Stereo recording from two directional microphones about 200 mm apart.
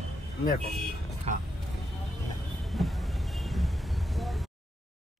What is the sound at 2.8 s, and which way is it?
Vehicle, centre (ahead or behind).